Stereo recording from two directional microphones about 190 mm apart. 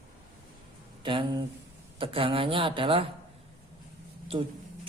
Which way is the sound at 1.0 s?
25° right (ahead or behind).